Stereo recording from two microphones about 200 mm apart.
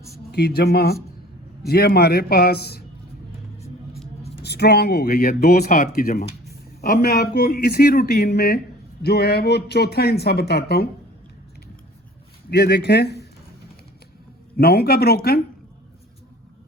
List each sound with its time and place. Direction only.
0.3 s speech: 55° left (ahead or behind)
4.4 s speech: 55° left (ahead or behind)
5.6 s speech: 40° left (ahead or behind)
12.5 s speech: 55° left (ahead or behind)
14.5 s speech: 50° left (ahead or behind)